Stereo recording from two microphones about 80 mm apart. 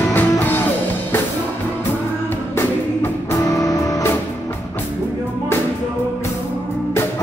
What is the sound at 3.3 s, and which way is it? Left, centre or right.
Music, left.